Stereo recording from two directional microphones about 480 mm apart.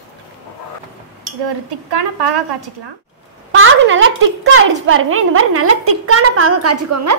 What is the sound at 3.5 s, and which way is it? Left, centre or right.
A woman's voice, right.